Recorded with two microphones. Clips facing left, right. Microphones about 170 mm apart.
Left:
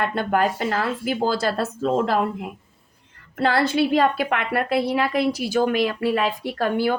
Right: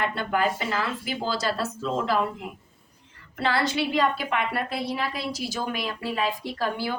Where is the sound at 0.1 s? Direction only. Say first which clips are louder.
Left 4 dB; 50° left (ahead or behind).